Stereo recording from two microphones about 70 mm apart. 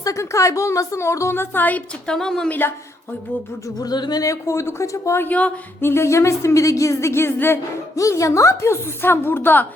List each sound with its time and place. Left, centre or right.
0.0 s a woman's voice: left
2.0 s a woman's voice: centre
2.5 s speech: left
3.8 s speech: left
4.2 s speech: left
5.2 s speech: left
5.8 s speech: left
7.9 s a woman's voice: left